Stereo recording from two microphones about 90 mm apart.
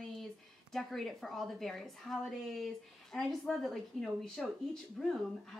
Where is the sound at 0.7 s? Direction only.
Centre (ahead or behind).